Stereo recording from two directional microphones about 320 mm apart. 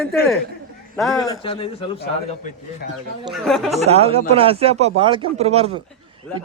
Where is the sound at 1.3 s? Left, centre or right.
Centre.